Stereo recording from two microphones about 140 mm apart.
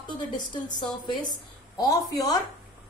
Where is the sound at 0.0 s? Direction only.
30° left (ahead or behind).